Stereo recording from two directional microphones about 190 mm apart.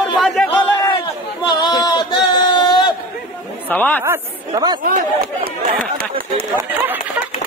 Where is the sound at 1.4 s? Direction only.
20° left (ahead or behind).